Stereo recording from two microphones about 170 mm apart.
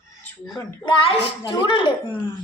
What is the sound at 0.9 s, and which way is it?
A child's voice, 30° left (ahead or behind).